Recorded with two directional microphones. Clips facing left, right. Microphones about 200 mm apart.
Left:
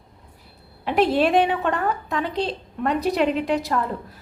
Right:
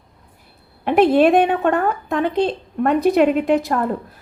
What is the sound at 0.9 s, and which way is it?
A woman's voice, 55° right (ahead or behind).